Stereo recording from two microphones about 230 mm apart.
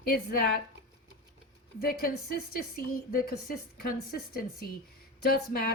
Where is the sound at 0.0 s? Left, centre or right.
Left.